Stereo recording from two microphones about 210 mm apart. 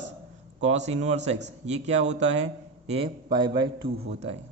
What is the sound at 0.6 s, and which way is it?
A man's voice, 30° right (ahead or behind).